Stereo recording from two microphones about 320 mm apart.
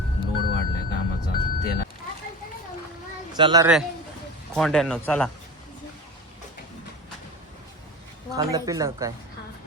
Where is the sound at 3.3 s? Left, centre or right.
Centre.